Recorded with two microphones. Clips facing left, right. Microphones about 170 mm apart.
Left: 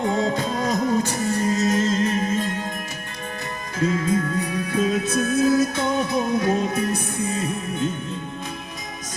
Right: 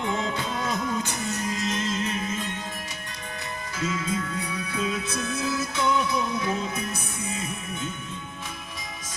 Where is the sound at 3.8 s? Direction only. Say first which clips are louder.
Left 7 dB; 40° left (ahead or behind).